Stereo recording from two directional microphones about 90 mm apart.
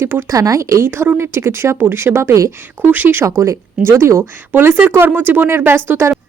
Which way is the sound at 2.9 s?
25° right (ahead or behind).